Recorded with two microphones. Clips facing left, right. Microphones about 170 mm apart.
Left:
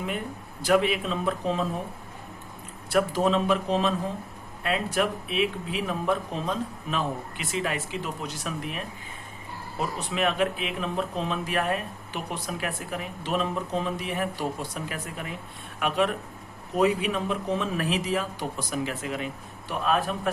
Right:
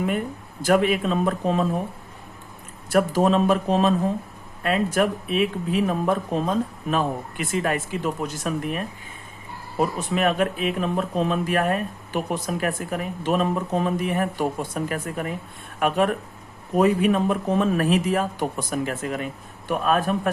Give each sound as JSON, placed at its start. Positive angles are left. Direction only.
{"t": 0.6, "sound": "speech", "side_deg": -45}
{"t": 2.9, "sound": "speech", "side_deg": -45}
{"t": 10.2, "sound": "speech", "side_deg": -45}